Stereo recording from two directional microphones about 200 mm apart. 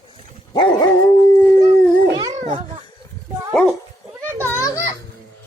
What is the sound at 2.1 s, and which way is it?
Babbling, 15° right (ahead or behind).